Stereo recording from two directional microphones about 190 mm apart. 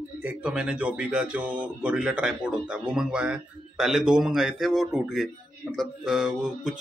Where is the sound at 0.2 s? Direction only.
5° right (ahead or behind).